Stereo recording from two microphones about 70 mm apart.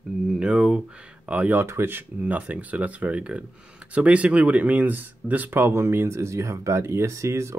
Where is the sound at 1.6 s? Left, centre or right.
Right.